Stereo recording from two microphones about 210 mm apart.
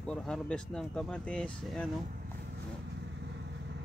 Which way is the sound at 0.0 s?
5° left (ahead or behind).